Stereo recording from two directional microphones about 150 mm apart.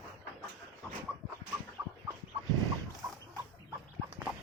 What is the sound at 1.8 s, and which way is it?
Chicken, 20° right (ahead or behind).